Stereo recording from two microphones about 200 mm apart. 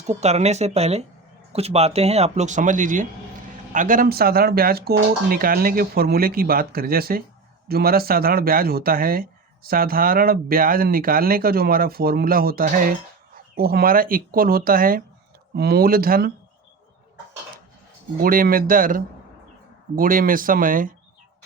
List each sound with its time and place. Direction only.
0.1 s speech: 35° right (ahead or behind)
18.2 s speech: 45° right (ahead or behind)